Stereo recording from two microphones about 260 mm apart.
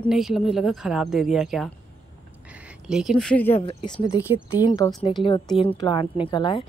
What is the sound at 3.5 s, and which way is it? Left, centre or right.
Speech, left.